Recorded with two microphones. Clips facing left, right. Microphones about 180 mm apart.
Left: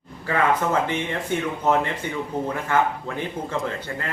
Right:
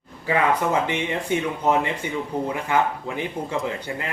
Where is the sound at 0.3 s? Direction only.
15° right (ahead or behind).